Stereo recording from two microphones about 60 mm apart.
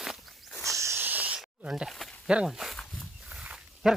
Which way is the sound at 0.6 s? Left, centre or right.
Right.